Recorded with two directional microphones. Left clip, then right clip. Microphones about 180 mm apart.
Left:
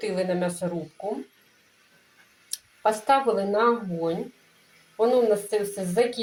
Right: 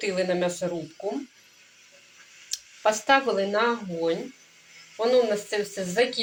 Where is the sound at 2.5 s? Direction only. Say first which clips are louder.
Even; 10° left (ahead or behind).